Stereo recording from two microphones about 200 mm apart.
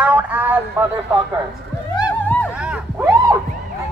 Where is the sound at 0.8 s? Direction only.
10° right (ahead or behind).